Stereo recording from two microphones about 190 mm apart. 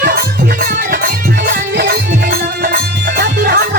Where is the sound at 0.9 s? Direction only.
50° right (ahead or behind).